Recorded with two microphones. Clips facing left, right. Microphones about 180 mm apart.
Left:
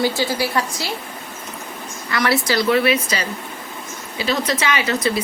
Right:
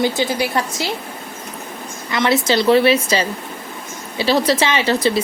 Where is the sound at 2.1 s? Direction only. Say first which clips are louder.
Right 3 dB; 20° right (ahead or behind).